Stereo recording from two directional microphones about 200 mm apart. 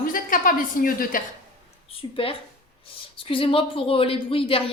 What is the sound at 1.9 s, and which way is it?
A woman's voice, 25° left (ahead or behind).